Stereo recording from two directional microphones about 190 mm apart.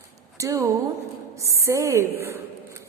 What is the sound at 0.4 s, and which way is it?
A woman's voice, 15° right (ahead or behind).